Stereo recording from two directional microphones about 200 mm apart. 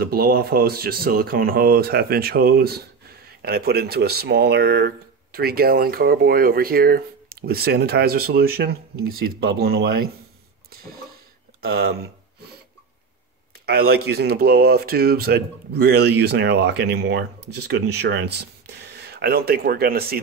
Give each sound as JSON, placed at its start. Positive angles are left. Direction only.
{"t": 0.0, "sound": "speech", "side_deg": -50}
{"t": 11.6, "sound": "a sound", "side_deg": -50}
{"t": 13.7, "sound": "speech", "side_deg": -50}